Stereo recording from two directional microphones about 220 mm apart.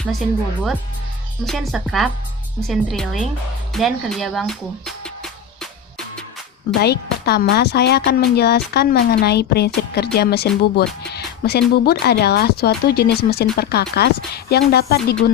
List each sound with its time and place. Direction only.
0.0 s speech: centre (ahead or behind)
6.8 s speech: 45° left (ahead or behind)